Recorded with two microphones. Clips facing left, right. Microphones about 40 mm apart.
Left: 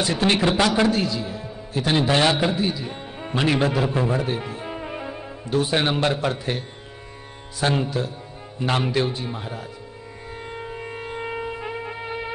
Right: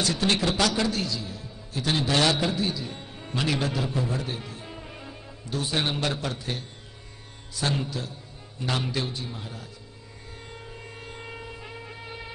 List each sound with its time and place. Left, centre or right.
0.0 s a man's voice: left
7.6 s speech: left
10.4 s shofar: left